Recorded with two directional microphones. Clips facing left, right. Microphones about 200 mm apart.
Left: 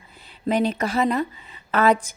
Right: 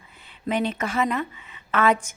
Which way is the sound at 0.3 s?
40° left (ahead or behind).